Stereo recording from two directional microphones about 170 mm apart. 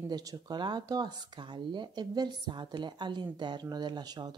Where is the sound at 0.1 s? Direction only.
20° right (ahead or behind).